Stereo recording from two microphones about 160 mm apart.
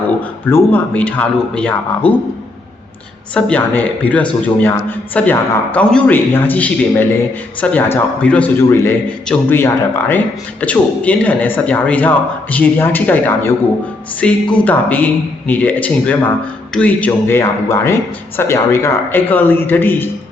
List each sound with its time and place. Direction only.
0.5 s a man's voice: 10° left (ahead or behind)
3.3 s a man's voice: 10° left (ahead or behind)